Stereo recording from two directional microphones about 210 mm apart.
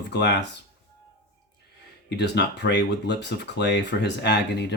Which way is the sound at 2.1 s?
55° left (ahead or behind).